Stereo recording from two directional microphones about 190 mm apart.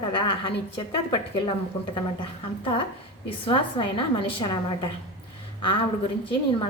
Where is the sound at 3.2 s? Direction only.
30° left (ahead or behind).